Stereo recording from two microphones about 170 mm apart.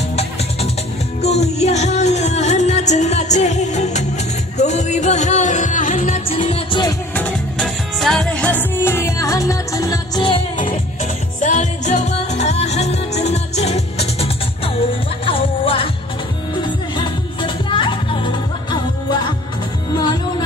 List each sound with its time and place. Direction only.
1.2 s music: 40° left (ahead or behind)
7.2 s music: 5° left (ahead or behind); by 10.4 s 25° left (ahead or behind)
11.4 s music: 45° left (ahead or behind); by 18.3 s 30° left (ahead or behind)
20.0 s music: 25° left (ahead or behind)